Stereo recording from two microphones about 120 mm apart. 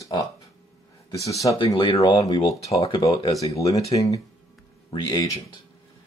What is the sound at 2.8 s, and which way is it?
Speech, 45° left (ahead or behind).